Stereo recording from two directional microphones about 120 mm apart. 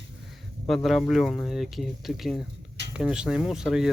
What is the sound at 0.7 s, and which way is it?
Speech, centre (ahead or behind).